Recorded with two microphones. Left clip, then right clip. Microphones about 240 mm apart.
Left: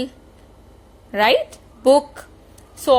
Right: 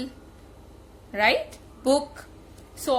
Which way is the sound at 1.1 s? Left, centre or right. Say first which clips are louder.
Left 6 dB; left.